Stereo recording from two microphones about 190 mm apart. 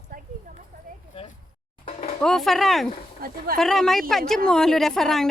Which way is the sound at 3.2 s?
50° right (ahead or behind).